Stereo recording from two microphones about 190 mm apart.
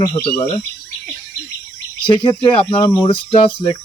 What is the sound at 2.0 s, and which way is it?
Speech, 25° left (ahead or behind).